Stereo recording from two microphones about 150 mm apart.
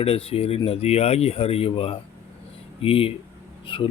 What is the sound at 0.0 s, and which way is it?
Speech, 40° left (ahead or behind).